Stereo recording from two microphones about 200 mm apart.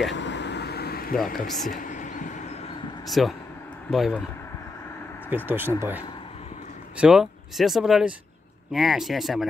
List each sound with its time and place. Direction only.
0.1 s vehicle: 60° left (ahead or behind)
1.3 s a sound: 45° left (ahead or behind)
3.1 s speech: centre (ahead or behind)
5.3 s speech: 10° right (ahead or behind)